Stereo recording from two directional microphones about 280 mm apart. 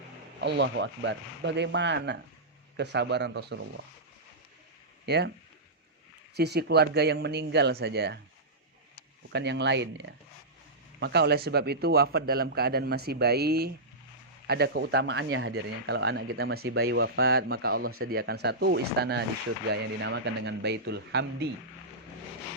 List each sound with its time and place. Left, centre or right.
0.4 s speech: right
5.0 s speech: right
6.3 s speech: right
9.3 s speech: right